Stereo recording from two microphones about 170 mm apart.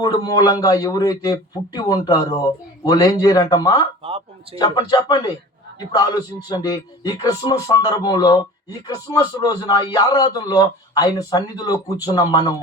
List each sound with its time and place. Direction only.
0.0 s a man's voice: 25° left (ahead or behind)